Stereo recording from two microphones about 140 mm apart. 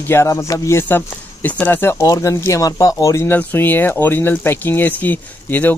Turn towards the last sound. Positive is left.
turn(degrees=10)  # may be behind; listen again after turning